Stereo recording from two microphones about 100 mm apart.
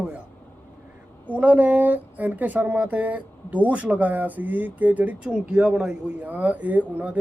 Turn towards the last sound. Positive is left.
turn(degrees=-15)  # may be behind; listen again after turning